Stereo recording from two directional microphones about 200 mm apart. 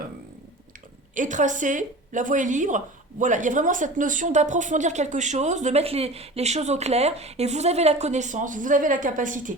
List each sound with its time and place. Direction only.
1.1 s a woman's voice: 40° right (ahead or behind)